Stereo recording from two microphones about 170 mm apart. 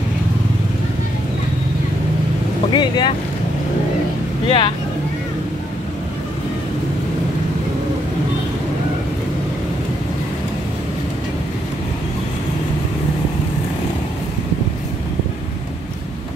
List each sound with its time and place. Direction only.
2.7 s speech: 25° left (ahead or behind)
4.5 s speech: 30° left (ahead or behind)